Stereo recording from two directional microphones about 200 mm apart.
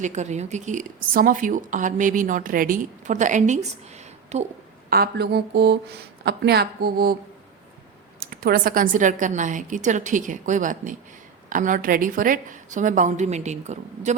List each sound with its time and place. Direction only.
0.0 s a woman's voice: 35° right (ahead or behind)
4.9 s a woman's voice: 50° right (ahead or behind)
8.2 s a woman's voice: 50° right (ahead or behind)